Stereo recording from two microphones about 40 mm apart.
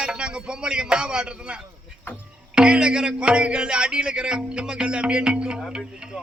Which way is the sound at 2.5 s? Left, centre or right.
Right.